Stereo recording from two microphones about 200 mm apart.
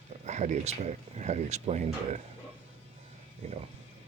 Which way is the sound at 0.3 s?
35° right (ahead or behind).